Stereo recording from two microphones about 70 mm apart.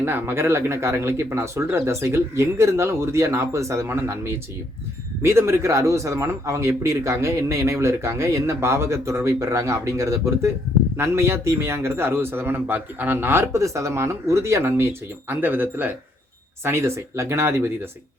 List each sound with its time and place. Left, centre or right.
0.0 s a man's voice: right
16.6 s speech: right